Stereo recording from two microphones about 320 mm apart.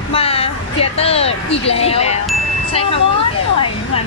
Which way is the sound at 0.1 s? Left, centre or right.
Centre.